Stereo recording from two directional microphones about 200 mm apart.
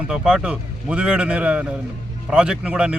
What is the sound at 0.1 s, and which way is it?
A man's voice, 5° right (ahead or behind).